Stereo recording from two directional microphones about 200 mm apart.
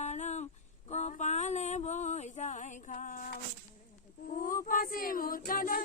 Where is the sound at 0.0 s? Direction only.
35° left (ahead or behind).